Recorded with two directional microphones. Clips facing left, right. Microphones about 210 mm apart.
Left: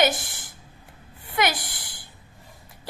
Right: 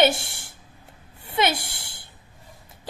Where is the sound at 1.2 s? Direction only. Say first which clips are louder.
Right 2 dB; 25° right (ahead or behind).